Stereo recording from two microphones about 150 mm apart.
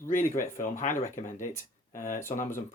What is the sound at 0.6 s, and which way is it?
Speech, 60° left (ahead or behind).